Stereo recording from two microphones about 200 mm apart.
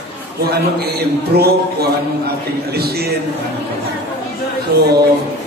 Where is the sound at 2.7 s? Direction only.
50° right (ahead or behind).